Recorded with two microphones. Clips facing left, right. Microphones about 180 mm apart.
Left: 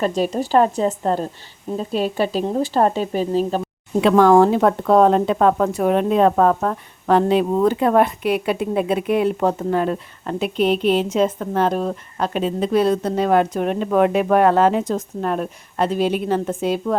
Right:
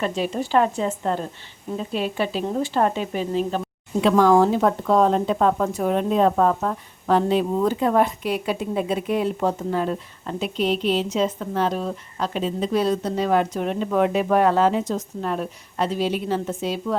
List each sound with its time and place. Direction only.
0.0 s speech: 40° left (ahead or behind)
4.0 s speech: 60° left (ahead or behind)